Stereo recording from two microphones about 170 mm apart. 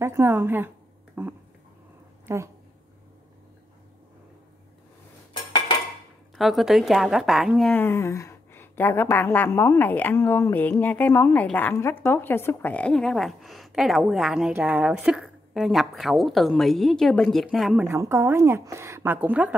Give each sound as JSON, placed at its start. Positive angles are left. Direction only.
{"t": 0.0, "sound": "a woman's voice", "side_deg": -15}
{"t": 1.2, "sound": "a sound", "side_deg": -10}
{"t": 2.2, "sound": "a woman's voice", "side_deg": -15}
{"t": 6.3, "sound": "a woman's voice", "side_deg": 0}
{"t": 7.7, "sound": "a woman's voice", "side_deg": 15}
{"t": 17.8, "sound": "a woman's voice", "side_deg": -15}